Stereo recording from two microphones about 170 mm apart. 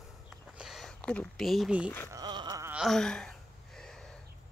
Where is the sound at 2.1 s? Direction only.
25° right (ahead or behind).